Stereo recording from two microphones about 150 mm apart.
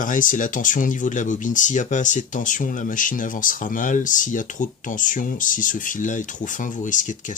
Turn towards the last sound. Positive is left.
turn(degrees=60)  # may be behind; listen again after turning